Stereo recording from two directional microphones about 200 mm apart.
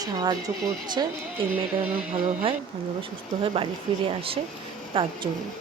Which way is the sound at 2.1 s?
35° right (ahead or behind).